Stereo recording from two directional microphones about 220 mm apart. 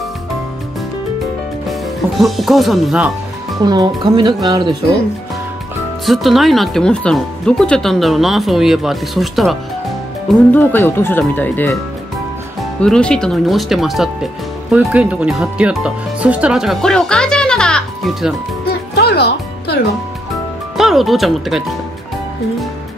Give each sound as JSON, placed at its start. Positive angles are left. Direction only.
{"t": 1.7, "sound": "speech", "side_deg": 0}
{"t": 3.6, "sound": "speech", "side_deg": -20}
{"t": 6.0, "sound": "speech", "side_deg": 0}
{"t": 12.8, "sound": "speech", "side_deg": 5}
{"t": 18.7, "sound": "music", "side_deg": 45}
{"t": 20.7, "sound": "speech", "side_deg": 0}